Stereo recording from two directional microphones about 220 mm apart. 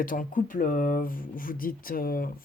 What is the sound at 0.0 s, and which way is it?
Speech, 40° left (ahead or behind).